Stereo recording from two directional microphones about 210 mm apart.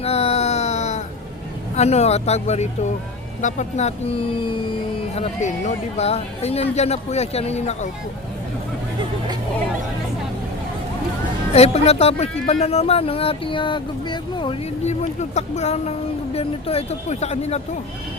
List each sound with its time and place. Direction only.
0.0 s a sound: 30° left (ahead or behind)
1.7 s speech: 30° left (ahead or behind)
11.5 s speech: 30° left (ahead or behind)